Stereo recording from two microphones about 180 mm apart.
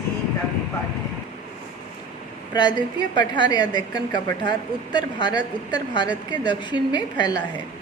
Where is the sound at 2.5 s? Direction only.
25° left (ahead or behind).